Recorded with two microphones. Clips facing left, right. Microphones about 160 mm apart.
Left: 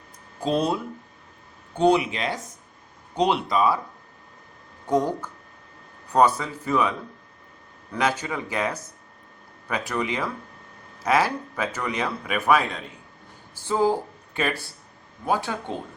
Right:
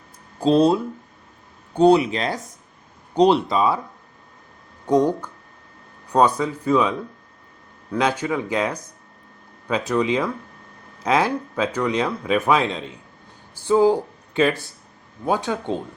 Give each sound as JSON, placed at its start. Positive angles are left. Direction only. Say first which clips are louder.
{"t": 0.3, "sound": "speech", "louder": "right 7 dB", "side_deg": -30}
{"t": 4.9, "sound": "speech", "louder": "right 5 dB", "side_deg": -15}
{"t": 7.9, "sound": "speech", "louder": "right 4 dB", "side_deg": -15}
{"t": 13.7, "sound": "speech", "louder": "right 6 dB", "side_deg": -15}